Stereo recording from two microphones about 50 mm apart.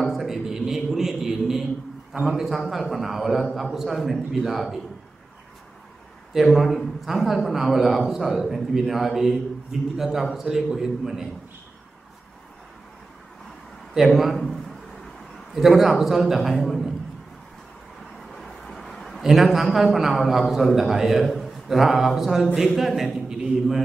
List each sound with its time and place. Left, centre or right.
0.0 s a sound: centre
2.1 s a man's voice: centre
2.4 s a man's voice: centre
6.5 s a man's voice: centre
13.9 s a man's voice: centre
16.5 s a man's voice: centre
18.3 s a sound: centre
19.2 s a man's voice: centre
23.2 s a man's voice: centre